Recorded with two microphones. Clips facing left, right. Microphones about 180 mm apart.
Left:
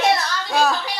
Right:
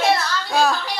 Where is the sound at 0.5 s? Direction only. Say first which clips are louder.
Even; centre (ahead or behind).